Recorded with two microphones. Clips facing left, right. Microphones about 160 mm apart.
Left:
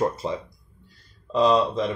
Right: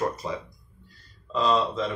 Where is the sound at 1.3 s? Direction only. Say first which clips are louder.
Left 5 dB; 15° left (ahead or behind).